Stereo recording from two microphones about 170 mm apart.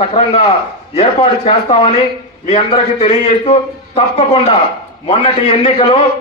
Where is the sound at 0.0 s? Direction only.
35° left (ahead or behind).